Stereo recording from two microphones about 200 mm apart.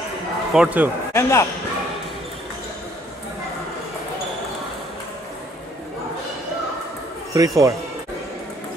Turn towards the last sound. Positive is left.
turn(degrees=-15)  # may be behind; listen again after turning